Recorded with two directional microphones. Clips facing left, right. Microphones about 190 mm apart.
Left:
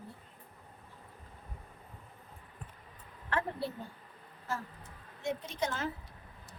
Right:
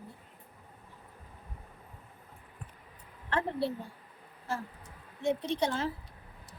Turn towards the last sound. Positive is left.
turn(degrees=-30)  # may be behind; listen again after turning